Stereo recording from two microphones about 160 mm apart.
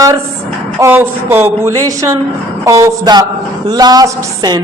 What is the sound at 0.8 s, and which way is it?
A man's voice, 15° right (ahead or behind).